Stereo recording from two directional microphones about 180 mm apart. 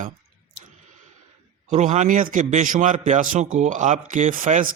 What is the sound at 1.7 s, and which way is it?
A man's voice, 40° right (ahead or behind).